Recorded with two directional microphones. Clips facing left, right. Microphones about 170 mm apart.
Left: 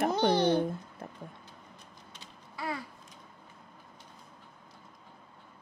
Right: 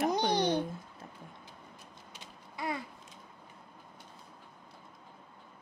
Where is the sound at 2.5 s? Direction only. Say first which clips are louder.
Even; 20° right (ahead or behind).